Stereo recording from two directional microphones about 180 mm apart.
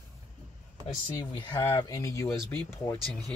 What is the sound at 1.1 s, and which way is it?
Speech, 25° left (ahead or behind).